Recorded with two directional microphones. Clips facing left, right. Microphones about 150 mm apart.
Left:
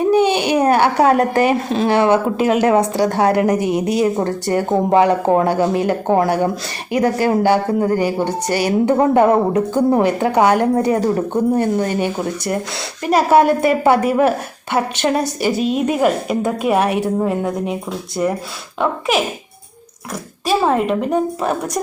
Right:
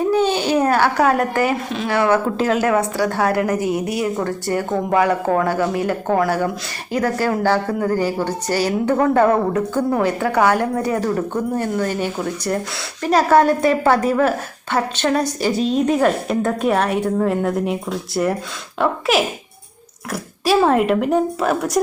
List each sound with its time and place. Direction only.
0.0 s a sound: 15° left (ahead or behind)
1.7 s a woman's voice: 30° left (ahead or behind); by 17.2 s 15° left (ahead or behind)
17.2 s a woman's voice: centre (ahead or behind)
20.4 s a woman's voice: centre (ahead or behind)